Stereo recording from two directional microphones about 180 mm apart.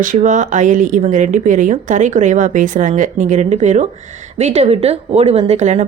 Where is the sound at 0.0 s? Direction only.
45° right (ahead or behind).